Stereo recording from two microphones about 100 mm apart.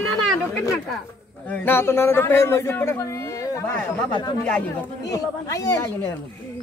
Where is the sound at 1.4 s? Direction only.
20° left (ahead or behind).